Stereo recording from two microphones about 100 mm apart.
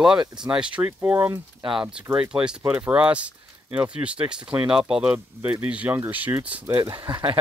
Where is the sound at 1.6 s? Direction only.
55° right (ahead or behind).